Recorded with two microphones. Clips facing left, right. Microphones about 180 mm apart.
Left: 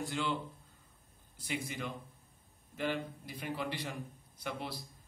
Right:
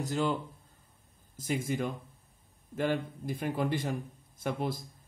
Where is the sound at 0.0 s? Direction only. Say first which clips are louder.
Right 5 dB; 40° right (ahead or behind).